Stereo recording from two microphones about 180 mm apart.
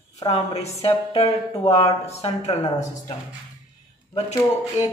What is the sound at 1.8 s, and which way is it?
A woman's voice, 35° left (ahead or behind).